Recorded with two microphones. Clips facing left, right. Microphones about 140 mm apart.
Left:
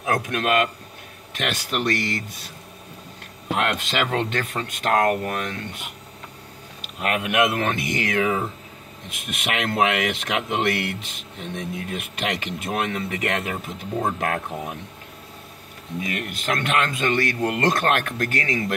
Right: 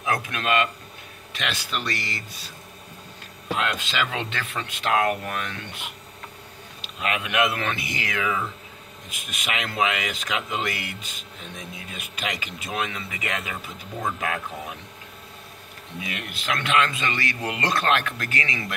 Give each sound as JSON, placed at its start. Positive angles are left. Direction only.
{"t": 0.0, "sound": "speech", "side_deg": 50}
{"t": 3.5, "sound": "speech", "side_deg": 55}
{"t": 6.8, "sound": "speech", "side_deg": 50}
{"t": 9.1, "sound": "speech", "side_deg": 60}
{"t": 16.1, "sound": "speech", "side_deg": 50}